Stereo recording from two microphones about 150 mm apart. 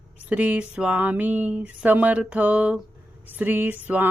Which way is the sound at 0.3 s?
10° right (ahead or behind).